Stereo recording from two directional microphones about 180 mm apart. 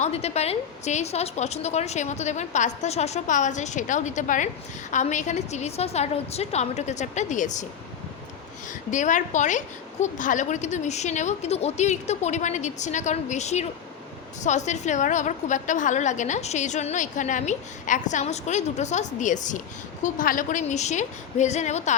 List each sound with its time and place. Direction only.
0.0 s a woman's voice: 35° left (ahead or behind)
8.9 s a woman's voice: 45° left (ahead or behind)